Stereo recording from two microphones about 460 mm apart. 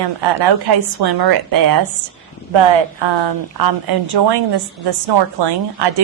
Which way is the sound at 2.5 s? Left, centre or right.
Right.